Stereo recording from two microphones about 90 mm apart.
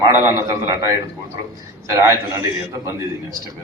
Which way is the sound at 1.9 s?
35° right (ahead or behind).